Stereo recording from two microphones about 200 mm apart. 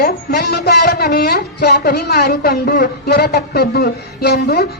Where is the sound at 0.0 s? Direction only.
50° left (ahead or behind).